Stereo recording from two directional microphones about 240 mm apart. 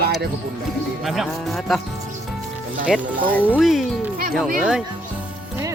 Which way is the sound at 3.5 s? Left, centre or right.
Centre.